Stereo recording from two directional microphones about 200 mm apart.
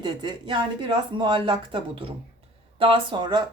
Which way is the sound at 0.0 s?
25° right (ahead or behind).